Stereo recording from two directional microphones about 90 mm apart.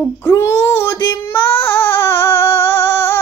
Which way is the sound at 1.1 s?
25° left (ahead or behind).